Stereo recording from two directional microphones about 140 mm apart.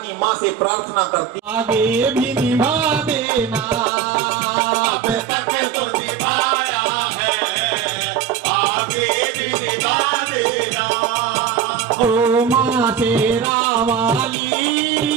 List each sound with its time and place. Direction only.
1.5 s music: 10° right (ahead or behind)
12.0 s music: 20° right (ahead or behind)